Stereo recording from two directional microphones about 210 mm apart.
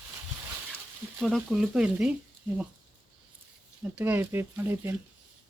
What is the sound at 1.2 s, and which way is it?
Speech, centre (ahead or behind).